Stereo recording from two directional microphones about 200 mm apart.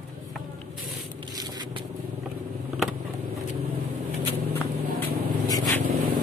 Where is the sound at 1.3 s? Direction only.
20° right (ahead or behind).